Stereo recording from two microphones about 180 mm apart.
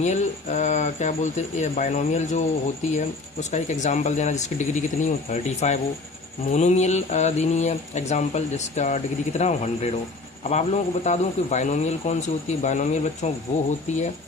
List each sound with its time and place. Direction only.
0.0 s a man's voice: 40° left (ahead or behind)
3.5 s a man's voice: 40° left (ahead or behind)